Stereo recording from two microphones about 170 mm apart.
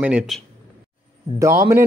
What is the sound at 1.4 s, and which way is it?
Speech, 15° right (ahead or behind).